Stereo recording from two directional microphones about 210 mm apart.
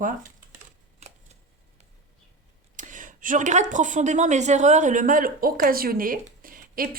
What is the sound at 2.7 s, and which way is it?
Speech, 40° right (ahead or behind).